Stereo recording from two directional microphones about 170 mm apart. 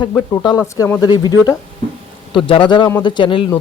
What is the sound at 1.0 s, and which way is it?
Speech, 25° left (ahead or behind).